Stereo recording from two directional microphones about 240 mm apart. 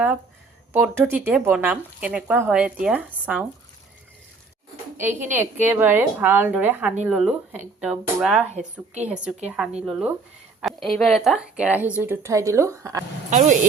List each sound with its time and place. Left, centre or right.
0.7 s speech: centre
4.9 s speech: centre
13.3 s speech: right